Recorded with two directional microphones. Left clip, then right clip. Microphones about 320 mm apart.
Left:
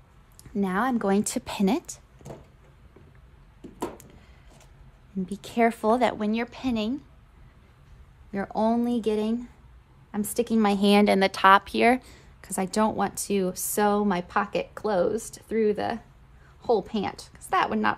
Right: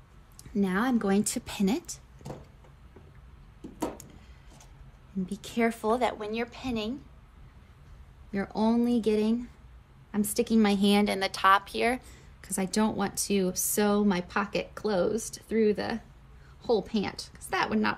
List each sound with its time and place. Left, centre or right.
0.6 s a woman's voice: centre
5.2 s a woman's voice: left
8.3 s a woman's voice: centre